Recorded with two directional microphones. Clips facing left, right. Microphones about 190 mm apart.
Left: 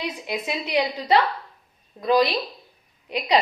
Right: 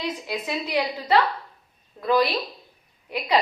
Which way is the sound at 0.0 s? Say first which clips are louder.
Even; 15° left (ahead or behind).